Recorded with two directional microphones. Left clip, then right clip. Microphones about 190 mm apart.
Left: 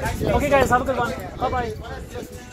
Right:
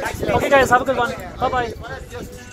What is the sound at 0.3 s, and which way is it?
Speech, 20° right (ahead or behind).